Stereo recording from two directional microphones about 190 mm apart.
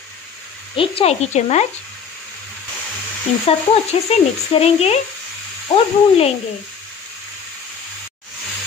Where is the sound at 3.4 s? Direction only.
35° left (ahead or behind).